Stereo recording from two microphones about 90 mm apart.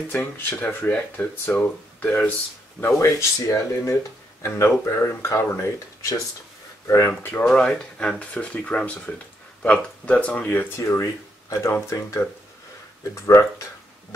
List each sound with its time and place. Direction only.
0.1 s speech: 20° left (ahead or behind)
2.8 s speech: 30° left (ahead or behind)
7.4 s speech: 10° left (ahead or behind); by 13.5 s 30° left (ahead or behind)